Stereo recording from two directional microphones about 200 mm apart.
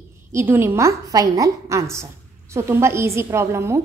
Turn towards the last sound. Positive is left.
turn(degrees=-15)  # may be behind; listen again after turning